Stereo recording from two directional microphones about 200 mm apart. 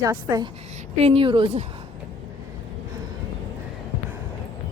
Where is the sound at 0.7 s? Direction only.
30° right (ahead or behind).